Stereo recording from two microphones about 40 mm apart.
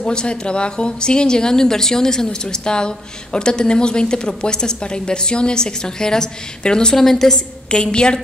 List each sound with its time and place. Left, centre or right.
0.0 s a woman's voice: left
7.0 s a woman's voice: centre
7.7 s a woman's voice: left